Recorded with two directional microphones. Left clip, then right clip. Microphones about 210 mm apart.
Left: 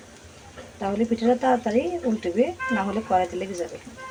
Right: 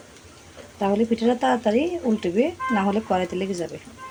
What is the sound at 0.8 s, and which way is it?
Speech, 40° right (ahead or behind).